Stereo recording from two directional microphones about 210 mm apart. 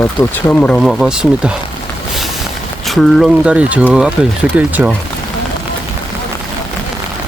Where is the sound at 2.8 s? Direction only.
Centre (ahead or behind).